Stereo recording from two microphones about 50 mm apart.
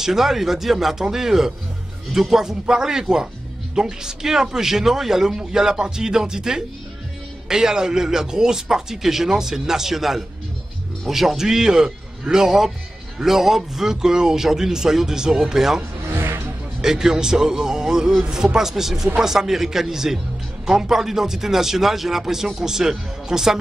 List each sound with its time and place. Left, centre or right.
0.0 s speech: centre
16.1 s music: right
16.8 s speech: centre